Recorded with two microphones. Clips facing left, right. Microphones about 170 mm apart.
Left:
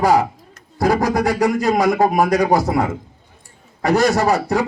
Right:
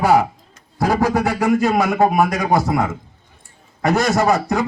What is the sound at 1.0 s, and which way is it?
A man's voice, 40° left (ahead or behind).